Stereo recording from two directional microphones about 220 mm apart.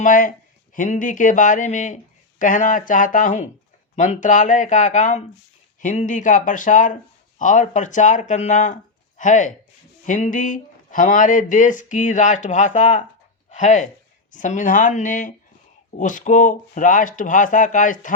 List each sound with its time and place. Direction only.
0.0 s speech: 35° left (ahead or behind)